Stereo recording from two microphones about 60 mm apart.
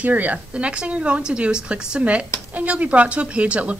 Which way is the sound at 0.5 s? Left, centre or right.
Centre.